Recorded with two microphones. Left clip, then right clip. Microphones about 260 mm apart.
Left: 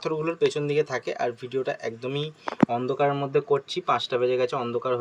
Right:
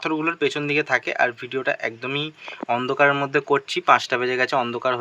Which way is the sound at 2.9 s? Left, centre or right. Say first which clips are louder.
Right 5 dB; right.